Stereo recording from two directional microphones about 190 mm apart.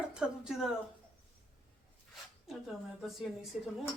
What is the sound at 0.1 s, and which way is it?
Speech, 5° right (ahead or behind).